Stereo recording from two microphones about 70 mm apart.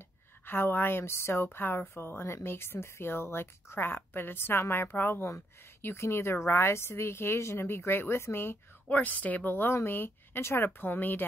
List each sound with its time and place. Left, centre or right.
0.5 s a woman's voice: left
8.8 s speech: left